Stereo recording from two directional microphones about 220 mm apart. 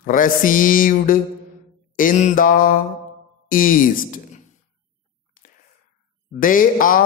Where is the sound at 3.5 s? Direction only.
40° left (ahead or behind).